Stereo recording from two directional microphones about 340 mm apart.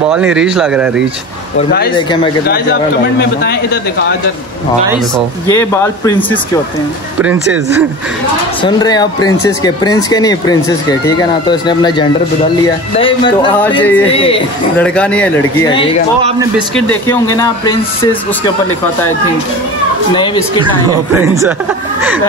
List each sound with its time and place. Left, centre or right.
0.1 s speech: centre
2.4 s a man's voice: left
5.1 s speech: centre
8.6 s speech: centre
16.2 s a man's voice: centre
16.5 s speech: centre